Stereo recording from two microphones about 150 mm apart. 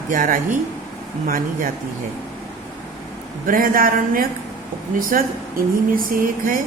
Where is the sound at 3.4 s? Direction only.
70° right (ahead or behind).